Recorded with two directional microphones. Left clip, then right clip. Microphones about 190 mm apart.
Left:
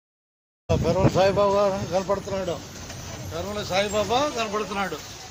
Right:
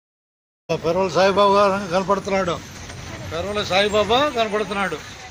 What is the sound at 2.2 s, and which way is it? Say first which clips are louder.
Speech: right 7 dB; 25° right (ahead or behind).